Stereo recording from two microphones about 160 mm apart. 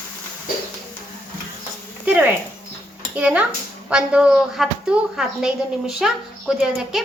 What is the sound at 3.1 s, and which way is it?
A child's voice, 10° right (ahead or behind).